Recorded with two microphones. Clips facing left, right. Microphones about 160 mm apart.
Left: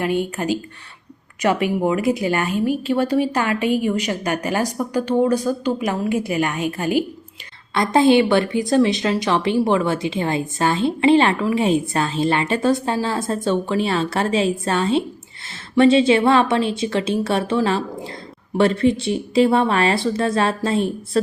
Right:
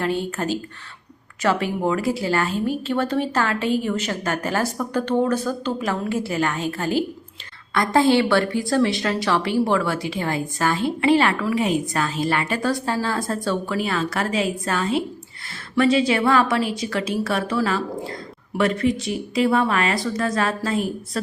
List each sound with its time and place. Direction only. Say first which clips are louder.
0.0 s speech: left 2 dB; 15° left (ahead or behind)